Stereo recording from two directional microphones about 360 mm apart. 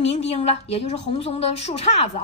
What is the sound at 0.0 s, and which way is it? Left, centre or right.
A woman's voice, centre.